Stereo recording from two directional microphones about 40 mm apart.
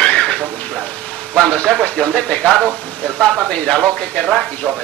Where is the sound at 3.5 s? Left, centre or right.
Left.